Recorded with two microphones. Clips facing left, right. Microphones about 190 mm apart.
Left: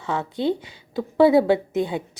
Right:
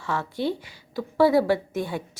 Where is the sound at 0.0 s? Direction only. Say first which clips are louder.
Left 3 dB; 20° left (ahead or behind).